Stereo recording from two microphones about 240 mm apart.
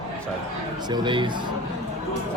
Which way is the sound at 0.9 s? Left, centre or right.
Centre.